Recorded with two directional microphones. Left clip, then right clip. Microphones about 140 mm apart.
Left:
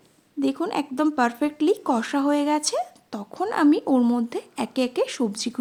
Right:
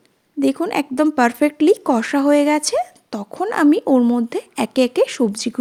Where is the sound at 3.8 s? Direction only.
30° right (ahead or behind).